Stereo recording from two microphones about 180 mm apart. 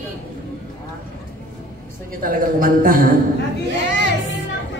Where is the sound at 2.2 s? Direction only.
50° right (ahead or behind).